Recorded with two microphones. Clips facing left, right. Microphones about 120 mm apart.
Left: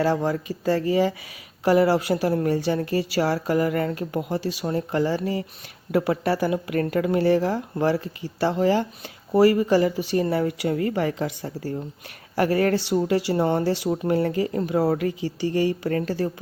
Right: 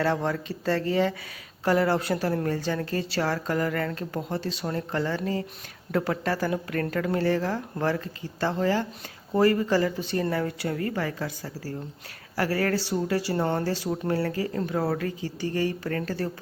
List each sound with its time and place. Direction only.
0.0 s speech: 5° left (ahead or behind)